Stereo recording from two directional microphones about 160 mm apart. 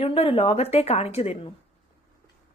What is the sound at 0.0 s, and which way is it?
A woman's voice, 35° left (ahead or behind).